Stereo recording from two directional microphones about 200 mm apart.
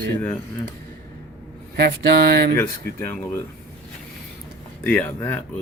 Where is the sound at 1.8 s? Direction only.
55° right (ahead or behind).